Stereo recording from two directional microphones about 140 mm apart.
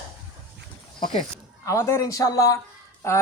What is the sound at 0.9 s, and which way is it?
Speech, 35° left (ahead or behind).